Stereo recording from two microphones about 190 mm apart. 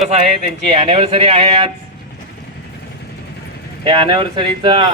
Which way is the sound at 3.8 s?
25° right (ahead or behind).